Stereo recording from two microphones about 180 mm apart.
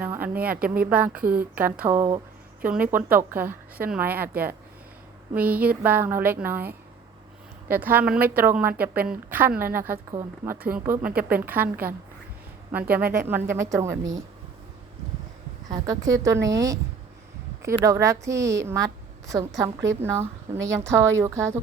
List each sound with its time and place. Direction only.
0.0 s a sound: 10° right (ahead or behind)
0.9 s a woman's voice: 10° right (ahead or behind)
15.7 s a woman's voice: 20° right (ahead or behind)
17.8 s a woman's voice: 15° right (ahead or behind)